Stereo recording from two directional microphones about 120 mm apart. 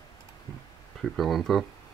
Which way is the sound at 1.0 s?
Centre (ahead or behind).